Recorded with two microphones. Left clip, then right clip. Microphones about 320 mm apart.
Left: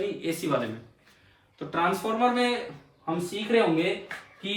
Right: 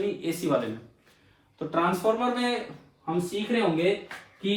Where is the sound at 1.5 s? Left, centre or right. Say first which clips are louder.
Even; centre.